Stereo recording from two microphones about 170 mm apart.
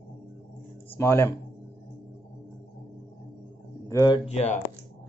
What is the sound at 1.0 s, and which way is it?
Speech, 15° left (ahead or behind).